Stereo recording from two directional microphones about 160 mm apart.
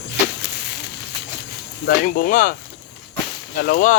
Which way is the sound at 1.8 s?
65° left (ahead or behind).